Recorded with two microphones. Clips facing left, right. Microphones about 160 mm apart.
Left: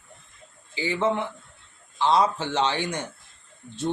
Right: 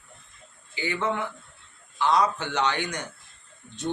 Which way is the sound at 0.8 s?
25° left (ahead or behind).